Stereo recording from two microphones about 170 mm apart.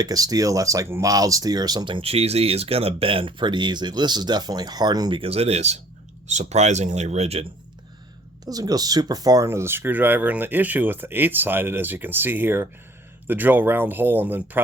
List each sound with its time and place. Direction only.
0.0 s speech: 20° right (ahead or behind); by 7.4 s 40° right (ahead or behind)
8.4 s speech: 20° right (ahead or behind)